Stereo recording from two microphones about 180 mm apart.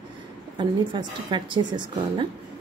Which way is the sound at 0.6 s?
25° right (ahead or behind).